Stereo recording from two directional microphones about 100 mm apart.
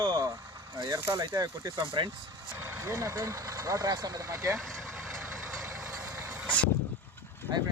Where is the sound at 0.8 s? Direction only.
45° right (ahead or behind).